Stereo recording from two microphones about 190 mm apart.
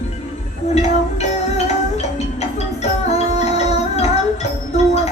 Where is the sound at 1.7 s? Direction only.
35° left (ahead or behind).